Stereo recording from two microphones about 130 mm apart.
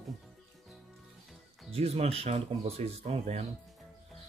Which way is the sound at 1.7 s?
50° right (ahead or behind).